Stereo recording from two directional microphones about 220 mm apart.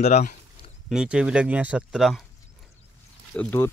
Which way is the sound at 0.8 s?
5° right (ahead or behind).